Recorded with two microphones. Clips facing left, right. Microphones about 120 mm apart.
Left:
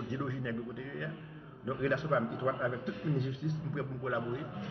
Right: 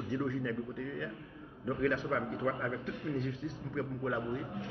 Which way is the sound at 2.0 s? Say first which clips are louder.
Left 3 dB; 25° left (ahead or behind).